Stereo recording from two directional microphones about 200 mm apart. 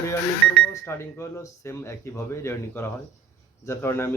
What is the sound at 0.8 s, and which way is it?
Speech, 10° left (ahead or behind).